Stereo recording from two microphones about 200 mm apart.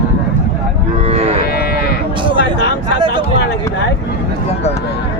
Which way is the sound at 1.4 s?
50° left (ahead or behind).